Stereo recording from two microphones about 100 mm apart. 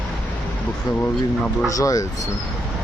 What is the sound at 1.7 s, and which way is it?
Speech, 35° left (ahead or behind).